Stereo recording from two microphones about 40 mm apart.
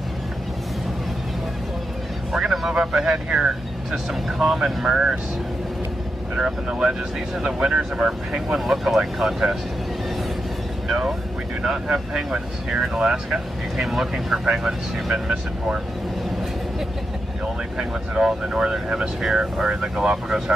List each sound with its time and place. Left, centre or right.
2.3 s vehicle: centre
2.7 s speech: centre
6.3 s speech: centre
8.5 s speech: centre
11.6 s speech: centre
17.7 s speech: centre
19.2 s speech: centre